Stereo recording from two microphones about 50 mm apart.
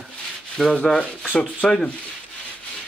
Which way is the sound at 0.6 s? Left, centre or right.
Centre.